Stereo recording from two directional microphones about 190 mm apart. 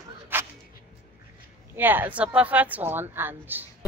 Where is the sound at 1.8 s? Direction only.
10° right (ahead or behind).